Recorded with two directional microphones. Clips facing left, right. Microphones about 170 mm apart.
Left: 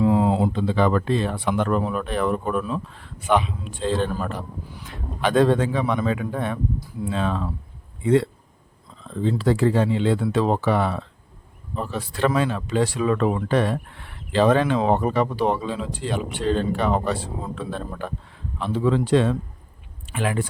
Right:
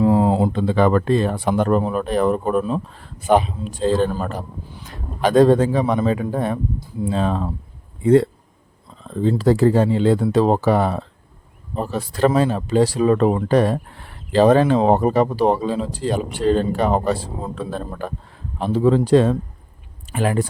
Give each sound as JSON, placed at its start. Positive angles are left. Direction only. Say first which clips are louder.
{"t": 0.0, "sound": "speech", "louder": "right 3 dB", "side_deg": -40}